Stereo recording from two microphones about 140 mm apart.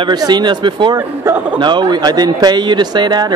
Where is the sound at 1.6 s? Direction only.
35° right (ahead or behind).